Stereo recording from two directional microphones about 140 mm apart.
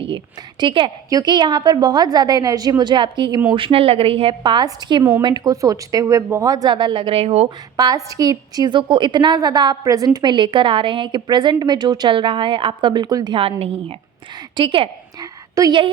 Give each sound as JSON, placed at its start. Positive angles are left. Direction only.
{"t": 0.6, "sound": "a woman's voice", "side_deg": -40}
{"t": 7.8, "sound": "a woman's voice", "side_deg": -25}
{"t": 13.4, "sound": "a woman's voice", "side_deg": -45}
{"t": 15.2, "sound": "whispering", "side_deg": -25}